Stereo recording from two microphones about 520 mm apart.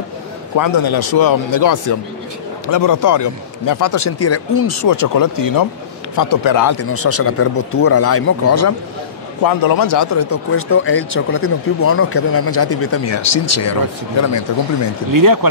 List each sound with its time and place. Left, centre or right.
0.6 s a man's voice: left
9.4 s speech: left
15.1 s speech: right